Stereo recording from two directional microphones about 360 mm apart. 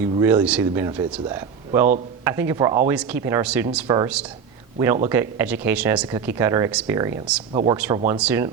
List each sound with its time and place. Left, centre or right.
0.0 s speech: centre